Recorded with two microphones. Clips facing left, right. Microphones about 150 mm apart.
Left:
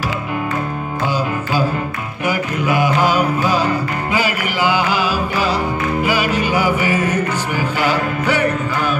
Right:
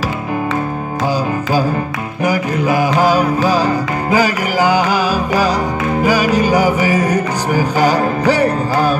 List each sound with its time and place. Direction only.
2.2 s music: 40° right (ahead or behind)